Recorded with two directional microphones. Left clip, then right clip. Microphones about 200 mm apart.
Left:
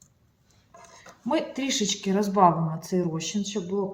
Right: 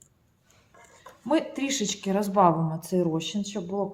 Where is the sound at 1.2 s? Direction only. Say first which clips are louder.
Right 1 dB; 25° right (ahead or behind).